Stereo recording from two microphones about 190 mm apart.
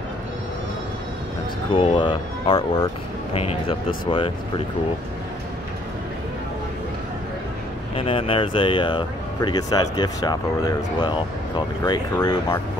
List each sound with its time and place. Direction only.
1.7 s speech: 25° left (ahead or behind)
7.9 s speech: 30° left (ahead or behind)